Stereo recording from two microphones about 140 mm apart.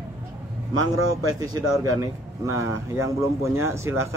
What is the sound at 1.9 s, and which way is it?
Speech, 25° right (ahead or behind).